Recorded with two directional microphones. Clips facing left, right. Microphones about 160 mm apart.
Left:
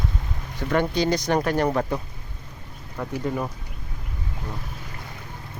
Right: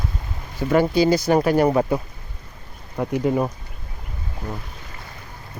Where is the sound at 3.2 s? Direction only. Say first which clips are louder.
Right 6 dB; 25° right (ahead or behind).